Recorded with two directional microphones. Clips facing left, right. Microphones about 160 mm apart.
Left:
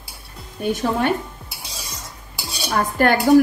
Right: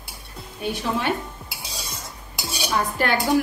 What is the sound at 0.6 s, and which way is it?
Speech, 50° left (ahead or behind).